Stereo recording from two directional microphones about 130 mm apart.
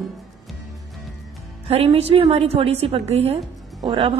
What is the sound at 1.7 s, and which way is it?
A woman's voice, 50° right (ahead or behind).